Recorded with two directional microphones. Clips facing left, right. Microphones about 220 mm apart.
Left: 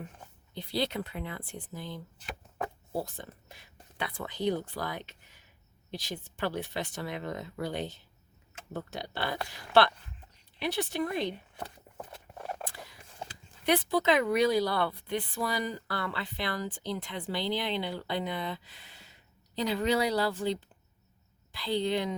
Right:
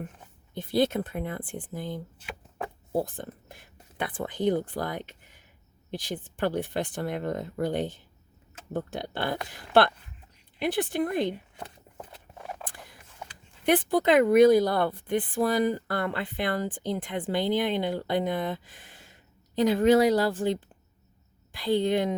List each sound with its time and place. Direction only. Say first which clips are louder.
0.5 s speech: right 7 dB; 50° right (ahead or behind)
13.2 s a sound: left 1 dB; 30° left (ahead or behind)
13.7 s a woman's voice: right 4 dB; 50° right (ahead or behind)